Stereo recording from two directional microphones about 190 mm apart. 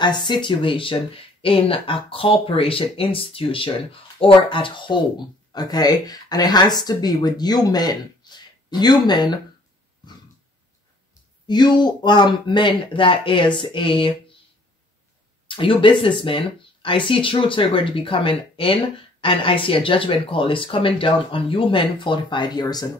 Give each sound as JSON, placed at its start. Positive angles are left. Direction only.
{"t": 0.0, "sound": "speech", "side_deg": 25}
{"t": 11.4, "sound": "speech", "side_deg": 25}
{"t": 15.4, "sound": "speech", "side_deg": 25}